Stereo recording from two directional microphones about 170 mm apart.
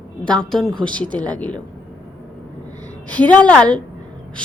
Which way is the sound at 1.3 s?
10° left (ahead or behind).